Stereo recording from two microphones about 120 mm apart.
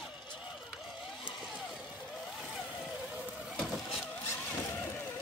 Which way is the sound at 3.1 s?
10° right (ahead or behind).